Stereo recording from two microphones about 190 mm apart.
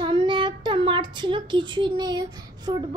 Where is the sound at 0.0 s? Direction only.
25° right (ahead or behind).